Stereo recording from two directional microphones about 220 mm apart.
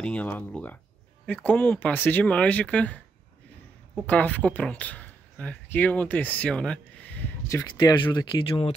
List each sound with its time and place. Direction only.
0.0 s speech: 5° left (ahead or behind)
4.0 s speech: 5° left (ahead or behind)
7.7 s speech: 20° left (ahead or behind)